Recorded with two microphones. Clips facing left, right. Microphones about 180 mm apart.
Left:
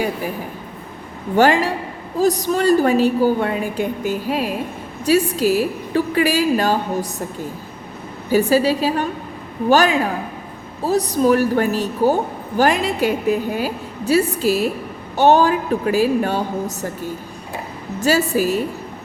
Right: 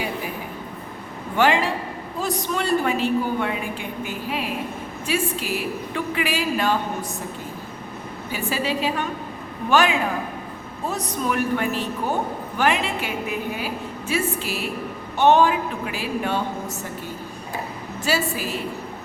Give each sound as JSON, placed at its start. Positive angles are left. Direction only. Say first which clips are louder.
{"t": 1.4, "sound": "a woman's voice", "louder": "left 5 dB", "side_deg": 40}
{"t": 8.3, "sound": "a woman's voice", "louder": "left 11 dB", "side_deg": 40}
{"t": 18.0, "sound": "a woman's voice", "louder": "left 8 dB", "side_deg": 40}